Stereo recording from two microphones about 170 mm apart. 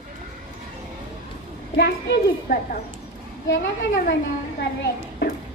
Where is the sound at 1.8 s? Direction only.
80° left.